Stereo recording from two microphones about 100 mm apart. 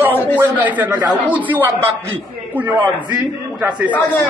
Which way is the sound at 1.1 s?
15° right (ahead or behind).